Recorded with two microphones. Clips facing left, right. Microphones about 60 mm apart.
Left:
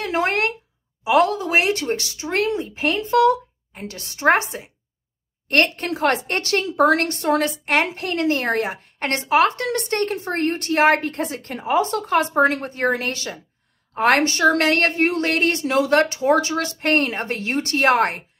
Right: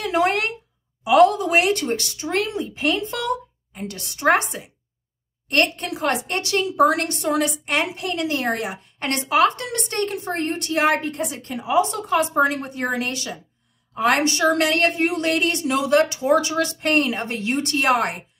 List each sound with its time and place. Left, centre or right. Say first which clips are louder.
0.0 s a woman's voice: right 1 dB; left